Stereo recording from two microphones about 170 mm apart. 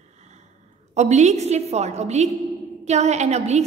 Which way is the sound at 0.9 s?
40° right (ahead or behind).